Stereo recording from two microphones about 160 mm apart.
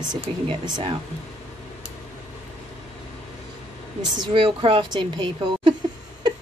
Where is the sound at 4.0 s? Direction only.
25° right (ahead or behind).